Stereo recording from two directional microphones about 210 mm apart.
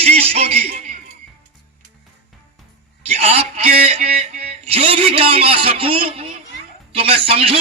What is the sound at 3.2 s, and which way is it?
A man's voice, 30° right (ahead or behind).